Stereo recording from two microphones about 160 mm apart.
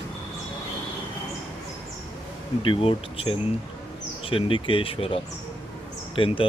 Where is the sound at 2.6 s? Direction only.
35° left (ahead or behind).